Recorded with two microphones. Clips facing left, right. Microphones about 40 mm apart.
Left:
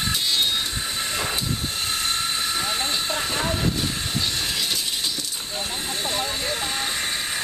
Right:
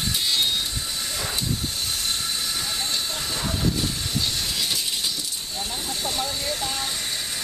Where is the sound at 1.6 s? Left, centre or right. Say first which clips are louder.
Left 2 dB; left.